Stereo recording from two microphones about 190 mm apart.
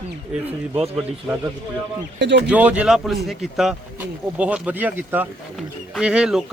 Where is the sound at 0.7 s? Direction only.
30° right (ahead or behind).